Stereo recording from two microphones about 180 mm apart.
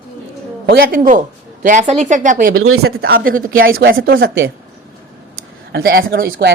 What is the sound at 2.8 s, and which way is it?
A woman's voice, 60° right (ahead or behind).